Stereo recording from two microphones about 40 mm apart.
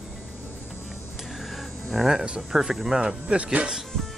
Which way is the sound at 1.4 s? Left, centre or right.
Centre.